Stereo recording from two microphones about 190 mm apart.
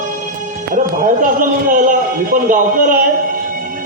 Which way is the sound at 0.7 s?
45° right (ahead or behind).